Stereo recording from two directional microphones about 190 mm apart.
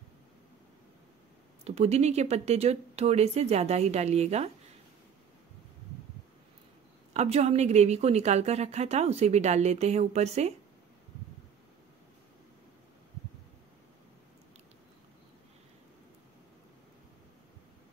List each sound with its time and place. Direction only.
1.6 s a woman's voice: 35° right (ahead or behind)
7.2 s a woman's voice: 35° right (ahead or behind)